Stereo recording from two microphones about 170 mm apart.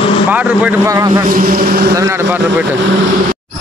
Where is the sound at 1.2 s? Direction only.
55° right (ahead or behind).